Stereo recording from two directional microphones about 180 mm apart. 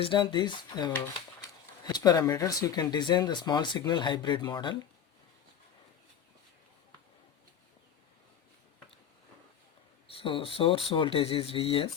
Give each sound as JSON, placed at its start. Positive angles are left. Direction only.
{"t": 0.0, "sound": "speech", "side_deg": 25}
{"t": 10.1, "sound": "speech", "side_deg": 30}